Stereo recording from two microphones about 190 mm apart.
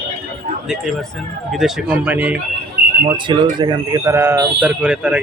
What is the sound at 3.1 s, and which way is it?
Speech, 25° right (ahead or behind).